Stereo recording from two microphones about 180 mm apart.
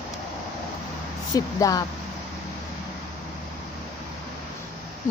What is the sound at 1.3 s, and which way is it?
Speech, 20° left (ahead or behind).